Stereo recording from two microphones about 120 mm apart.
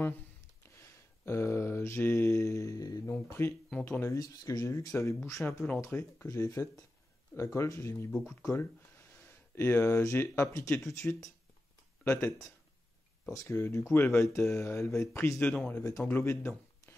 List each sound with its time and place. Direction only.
0.7 s mantra: 20° left (ahead or behind)
3.7 s speech: 15° left (ahead or behind)
6.2 s speech: 30° left (ahead or behind)
13.3 s speech: 25° left (ahead or behind)
15.4 s speech: 5° left (ahead or behind)
16.0 s speech: 20° left (ahead or behind)